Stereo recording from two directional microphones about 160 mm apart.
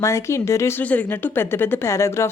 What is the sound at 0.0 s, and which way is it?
Speech, 15° left (ahead or behind).